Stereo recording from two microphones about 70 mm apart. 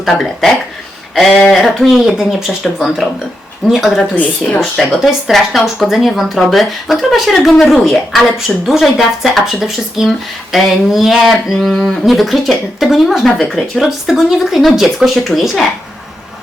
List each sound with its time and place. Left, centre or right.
0.0 s speech: centre
1.5 s speech: centre
4.1 s speech: left
4.6 s speech: centre
11.7 s speech: centre